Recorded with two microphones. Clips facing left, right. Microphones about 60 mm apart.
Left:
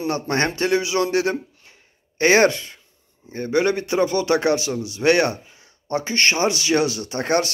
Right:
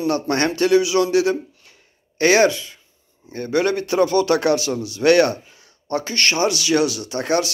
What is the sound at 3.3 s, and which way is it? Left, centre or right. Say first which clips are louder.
Speech: even; left.